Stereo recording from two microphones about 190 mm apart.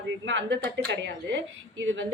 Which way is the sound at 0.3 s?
70° right (ahead or behind).